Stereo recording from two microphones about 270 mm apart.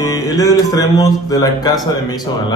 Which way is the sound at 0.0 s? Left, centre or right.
Centre.